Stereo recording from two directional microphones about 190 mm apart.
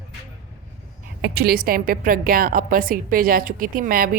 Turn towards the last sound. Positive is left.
turn(degrees=-50)  # may be behind; listen again after turning